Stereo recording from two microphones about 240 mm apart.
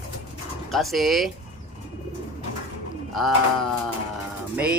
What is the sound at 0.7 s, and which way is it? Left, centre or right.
Speech, centre.